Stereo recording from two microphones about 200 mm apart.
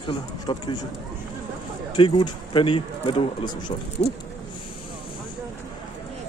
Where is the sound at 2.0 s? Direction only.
25° left (ahead or behind).